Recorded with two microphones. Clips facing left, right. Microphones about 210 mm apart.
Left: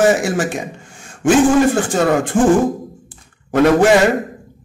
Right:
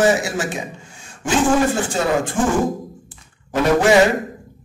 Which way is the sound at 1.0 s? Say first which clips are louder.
Left 6 dB; 55° left (ahead or behind).